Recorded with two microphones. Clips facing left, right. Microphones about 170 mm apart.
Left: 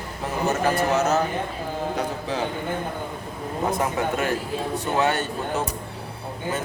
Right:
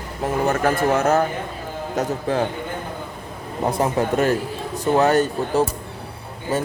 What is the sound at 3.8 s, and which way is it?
A man's voice, 35° right (ahead or behind).